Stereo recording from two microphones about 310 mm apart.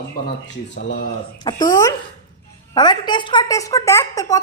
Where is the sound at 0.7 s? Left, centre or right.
Left.